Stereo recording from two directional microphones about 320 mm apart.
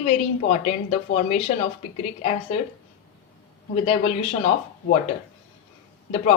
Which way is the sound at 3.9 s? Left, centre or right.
Centre.